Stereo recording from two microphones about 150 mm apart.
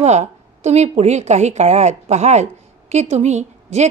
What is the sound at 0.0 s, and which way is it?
A woman's voice, 50° right (ahead or behind).